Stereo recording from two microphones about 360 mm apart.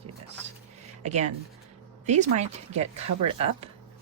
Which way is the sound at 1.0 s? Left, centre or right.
Centre.